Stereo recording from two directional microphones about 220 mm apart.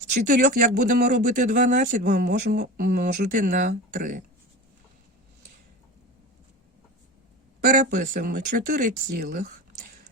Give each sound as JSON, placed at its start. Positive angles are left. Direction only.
{"t": 0.3, "sound": "speech", "side_deg": -40}
{"t": 7.8, "sound": "speech", "side_deg": -40}